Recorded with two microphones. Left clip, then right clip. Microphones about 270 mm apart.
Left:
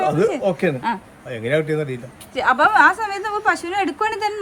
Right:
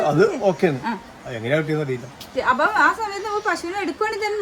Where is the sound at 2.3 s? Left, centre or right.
Left.